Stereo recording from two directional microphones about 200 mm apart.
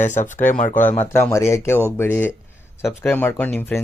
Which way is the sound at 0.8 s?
10° left (ahead or behind).